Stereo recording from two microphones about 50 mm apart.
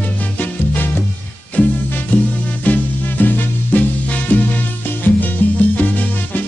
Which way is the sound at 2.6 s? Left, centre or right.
Left.